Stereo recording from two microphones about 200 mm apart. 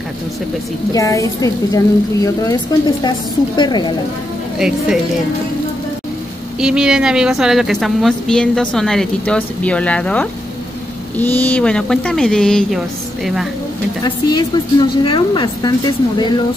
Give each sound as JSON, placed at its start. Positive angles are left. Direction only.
{"t": 0.9, "sound": "a woman's voice", "side_deg": 15}
{"t": 4.6, "sound": "a woman's voice", "side_deg": -5}
{"t": 6.6, "sound": "a woman's voice", "side_deg": -5}
{"t": 14.0, "sound": "a woman's voice", "side_deg": 20}